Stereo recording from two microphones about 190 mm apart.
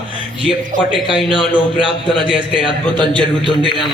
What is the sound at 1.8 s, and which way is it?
Speech, 25° left (ahead or behind).